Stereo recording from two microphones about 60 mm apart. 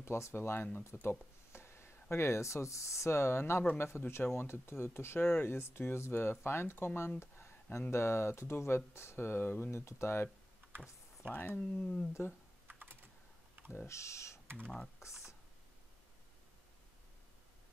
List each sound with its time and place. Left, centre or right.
0.0 s speech: left
0.9 s speech: left
1.5 s speech: left
7.2 s a sound: left
7.9 s speech: left
11.3 s speech: left
11.7 s speech: centre
12.6 s typing: right
13.8 s speech: left